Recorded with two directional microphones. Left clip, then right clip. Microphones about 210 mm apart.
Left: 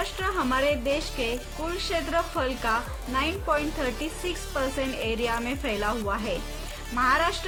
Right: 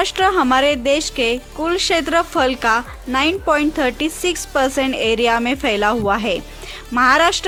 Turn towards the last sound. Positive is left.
turn(degrees=-55)  # may be behind; listen again after turning